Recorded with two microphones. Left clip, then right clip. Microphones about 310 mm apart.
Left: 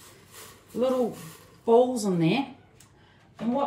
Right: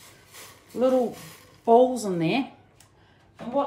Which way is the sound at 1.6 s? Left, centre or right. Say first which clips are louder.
Right 2 dB; right.